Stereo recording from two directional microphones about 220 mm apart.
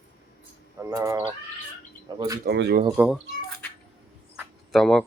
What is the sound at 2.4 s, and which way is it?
Speech, 50° right (ahead or behind).